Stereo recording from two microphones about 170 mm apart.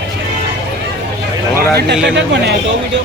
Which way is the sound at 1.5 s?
70° right (ahead or behind).